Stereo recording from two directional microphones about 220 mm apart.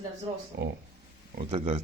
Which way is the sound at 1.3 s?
30° right (ahead or behind).